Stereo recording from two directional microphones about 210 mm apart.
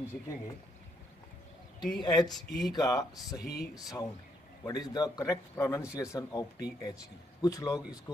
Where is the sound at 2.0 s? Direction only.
20° left (ahead or behind).